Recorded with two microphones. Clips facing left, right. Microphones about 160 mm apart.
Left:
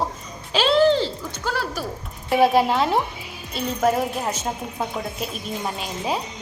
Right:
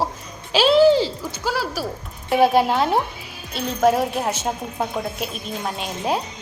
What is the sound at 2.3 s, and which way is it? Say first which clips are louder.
A woman's voice: right 1 dB; centre (ahead or behind).